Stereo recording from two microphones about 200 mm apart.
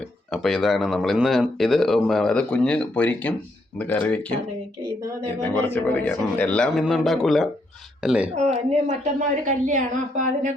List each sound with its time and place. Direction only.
0.3 s speech: centre (ahead or behind)
5.4 s speech: 10° left (ahead or behind)
8.4 s speech: 30° right (ahead or behind)
9.4 s a woman's voice: 40° right (ahead or behind)